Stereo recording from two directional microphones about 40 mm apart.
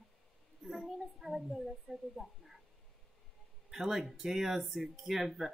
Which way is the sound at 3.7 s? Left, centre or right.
Centre.